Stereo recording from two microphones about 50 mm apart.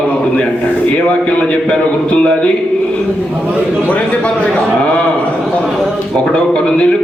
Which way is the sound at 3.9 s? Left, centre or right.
Left.